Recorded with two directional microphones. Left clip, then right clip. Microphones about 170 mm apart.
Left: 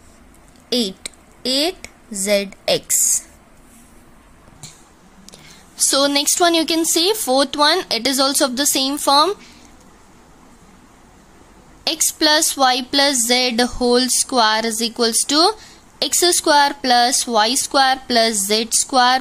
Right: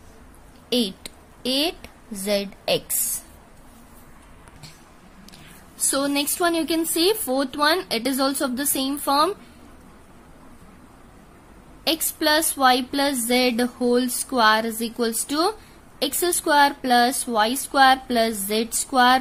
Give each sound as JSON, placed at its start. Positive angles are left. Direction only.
{"t": 0.7, "sound": "a sound", "side_deg": 10}
{"t": 5.9, "sound": "speech", "side_deg": 20}
{"t": 11.8, "sound": "speech", "side_deg": 20}